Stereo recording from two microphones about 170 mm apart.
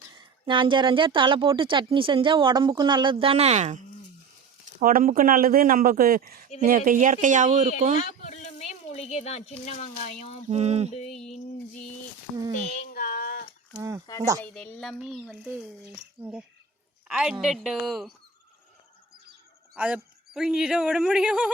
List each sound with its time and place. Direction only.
0.1 s speech: 30° right (ahead or behind)
4.8 s speech: 55° right (ahead or behind)
7.9 s speech: 45° left (ahead or behind)
10.5 s a sound: 40° right (ahead or behind)
11.1 s speech: centre (ahead or behind)
12.6 s a sound: 50° left (ahead or behind)
14.1 s speech: 20° left (ahead or behind)
14.4 s speech: 5° left (ahead or behind)
17.1 s speech: 5° right (ahead or behind)
19.7 s speech: 5° right (ahead or behind)